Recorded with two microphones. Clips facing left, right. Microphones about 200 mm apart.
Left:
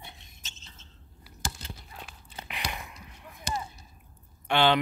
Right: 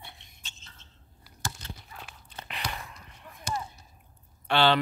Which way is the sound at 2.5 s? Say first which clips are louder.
Even; 15° left (ahead or behind).